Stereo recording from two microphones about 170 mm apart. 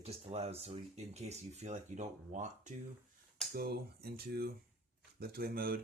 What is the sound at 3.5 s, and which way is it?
Speech, 65° right (ahead or behind).